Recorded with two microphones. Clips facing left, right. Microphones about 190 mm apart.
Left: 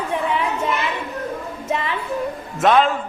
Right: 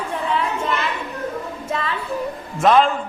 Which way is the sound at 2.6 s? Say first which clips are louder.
Right 1 dB; centre (ahead or behind).